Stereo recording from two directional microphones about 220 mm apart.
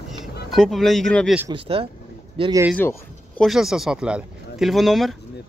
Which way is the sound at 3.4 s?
Centre (ahead or behind).